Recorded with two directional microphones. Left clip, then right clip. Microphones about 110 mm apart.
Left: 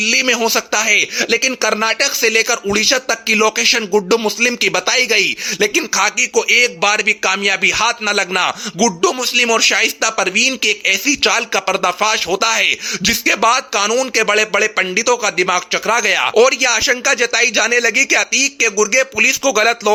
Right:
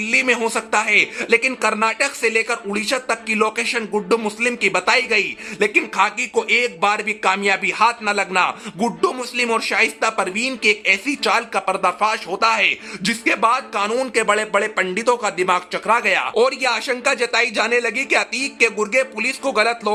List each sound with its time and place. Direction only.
0.0 s speech: 35° left (ahead or behind)
14.2 s speech: 30° left (ahead or behind)
15.9 s speech: 50° left (ahead or behind)
16.3 s speech: 30° left (ahead or behind)